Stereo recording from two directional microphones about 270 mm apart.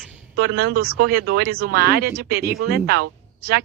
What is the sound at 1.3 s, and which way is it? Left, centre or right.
Speech, right.